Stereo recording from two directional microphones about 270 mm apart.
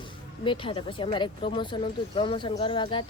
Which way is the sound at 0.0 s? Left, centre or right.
Centre.